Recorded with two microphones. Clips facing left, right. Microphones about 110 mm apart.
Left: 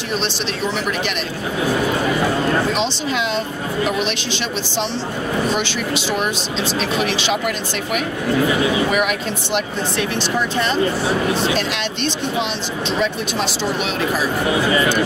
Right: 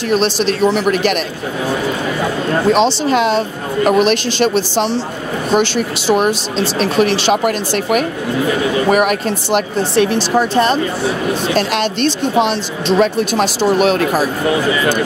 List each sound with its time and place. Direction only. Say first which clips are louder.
0.1 s a woman's voice: right 9 dB; 45° right (ahead or behind)
2.7 s a woman's voice: right 8 dB; 45° right (ahead or behind)
11.4 s a woman's voice: right 5 dB; 45° right (ahead or behind)